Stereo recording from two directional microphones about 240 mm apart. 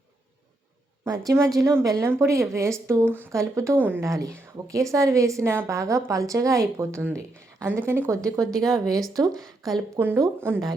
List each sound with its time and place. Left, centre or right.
1.0 s a woman's voice: centre
8.5 s speech: centre
9.1 s a woman's voice: centre